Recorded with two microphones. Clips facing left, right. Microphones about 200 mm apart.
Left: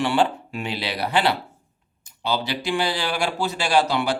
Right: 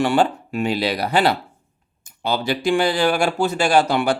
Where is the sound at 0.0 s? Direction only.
45° right (ahead or behind).